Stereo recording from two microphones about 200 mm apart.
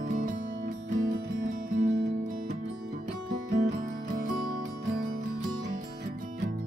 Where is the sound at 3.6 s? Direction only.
40° right (ahead or behind).